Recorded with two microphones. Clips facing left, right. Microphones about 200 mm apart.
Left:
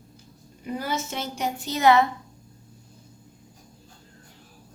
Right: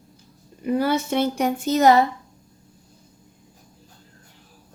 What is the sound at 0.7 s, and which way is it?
Speech, 60° right (ahead or behind).